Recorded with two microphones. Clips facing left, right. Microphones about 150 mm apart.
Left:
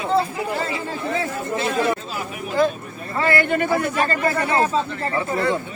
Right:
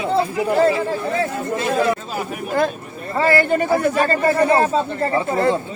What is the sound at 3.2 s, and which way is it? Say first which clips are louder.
Speech: right 3 dB; 35° right (ahead or behind).